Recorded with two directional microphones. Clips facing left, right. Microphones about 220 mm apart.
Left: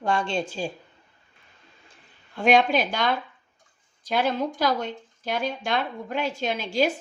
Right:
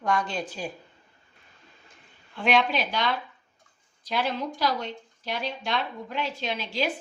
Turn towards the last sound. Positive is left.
turn(degrees=45)  # may be behind; listen again after turning